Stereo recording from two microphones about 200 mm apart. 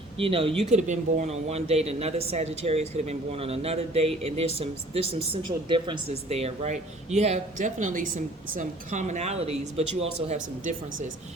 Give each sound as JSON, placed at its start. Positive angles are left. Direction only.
{"t": 0.2, "sound": "speech", "side_deg": -25}